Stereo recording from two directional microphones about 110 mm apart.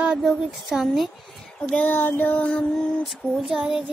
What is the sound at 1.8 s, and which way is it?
Child singing, 20° left (ahead or behind).